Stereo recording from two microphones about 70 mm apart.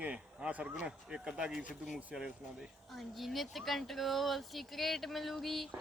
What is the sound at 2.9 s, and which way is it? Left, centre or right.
Speech, centre.